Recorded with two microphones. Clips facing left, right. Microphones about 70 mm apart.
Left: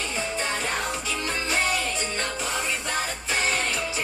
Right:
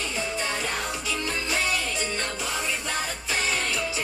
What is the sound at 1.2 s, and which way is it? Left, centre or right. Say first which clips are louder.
Music: left 2 dB; left.